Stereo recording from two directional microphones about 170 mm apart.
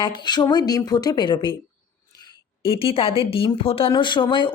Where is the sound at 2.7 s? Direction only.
35° left (ahead or behind).